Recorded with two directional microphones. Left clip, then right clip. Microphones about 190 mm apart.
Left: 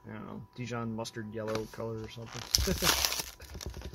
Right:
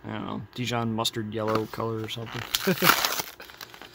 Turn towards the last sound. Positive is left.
turn(degrees=0)  # may be behind; listen again after turning